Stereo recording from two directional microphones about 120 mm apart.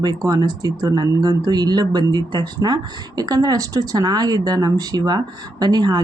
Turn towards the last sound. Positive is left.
turn(degrees=-35)  # may be behind; listen again after turning